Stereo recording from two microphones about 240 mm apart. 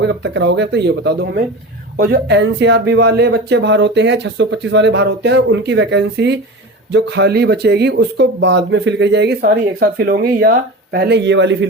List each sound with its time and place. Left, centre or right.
0.0 s speech: right